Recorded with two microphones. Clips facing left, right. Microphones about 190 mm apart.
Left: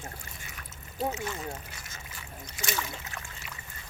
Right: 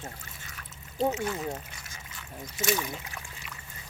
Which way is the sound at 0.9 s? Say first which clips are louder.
Right 4 dB; 5° left (ahead or behind).